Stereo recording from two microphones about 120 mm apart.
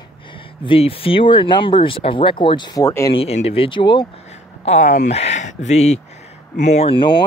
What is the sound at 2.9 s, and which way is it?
Speech, 25° left (ahead or behind).